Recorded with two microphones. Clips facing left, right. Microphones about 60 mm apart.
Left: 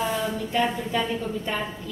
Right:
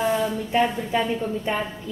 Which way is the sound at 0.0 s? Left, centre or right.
Centre.